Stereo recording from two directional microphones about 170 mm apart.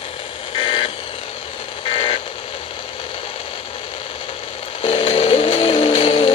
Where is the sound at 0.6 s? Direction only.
30° left (ahead or behind).